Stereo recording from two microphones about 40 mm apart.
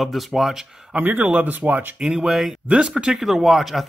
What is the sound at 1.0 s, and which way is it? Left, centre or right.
Speech, right.